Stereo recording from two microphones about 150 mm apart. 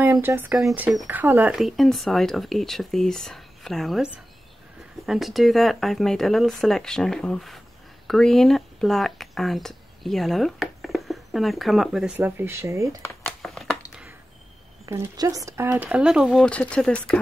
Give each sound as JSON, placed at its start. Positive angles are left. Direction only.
{"t": 0.0, "sound": "speech", "side_deg": -15}
{"t": 1.5, "sound": "speech", "side_deg": 0}
{"t": 12.3, "sound": "speech", "side_deg": -15}
{"t": 13.2, "sound": "a sound", "side_deg": 0}
{"t": 14.9, "sound": "speech", "side_deg": -20}
{"t": 16.4, "sound": "speech", "side_deg": 10}